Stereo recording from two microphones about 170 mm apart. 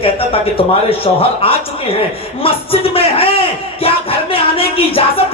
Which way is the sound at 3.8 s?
35° left (ahead or behind).